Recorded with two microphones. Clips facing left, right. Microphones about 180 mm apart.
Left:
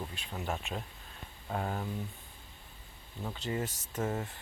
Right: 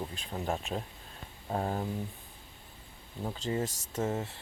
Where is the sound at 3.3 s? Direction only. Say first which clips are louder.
Right 3 dB; 30° right (ahead or behind).